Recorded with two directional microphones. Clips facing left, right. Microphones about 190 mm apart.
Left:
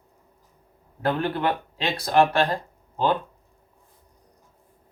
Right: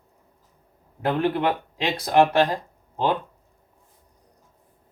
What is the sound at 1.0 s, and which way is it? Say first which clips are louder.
Speech: right 2 dB; 15° right (ahead or behind).